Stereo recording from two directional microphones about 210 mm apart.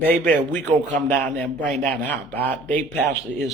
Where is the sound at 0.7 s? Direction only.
30° right (ahead or behind).